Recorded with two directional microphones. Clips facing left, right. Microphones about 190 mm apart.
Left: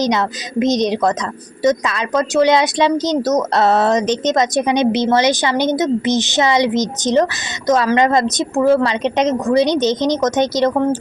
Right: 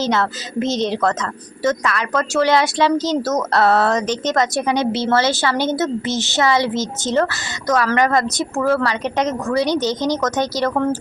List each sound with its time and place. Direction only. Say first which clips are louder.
0.0 s a woman's voice: left 2 dB; 15° left (ahead or behind)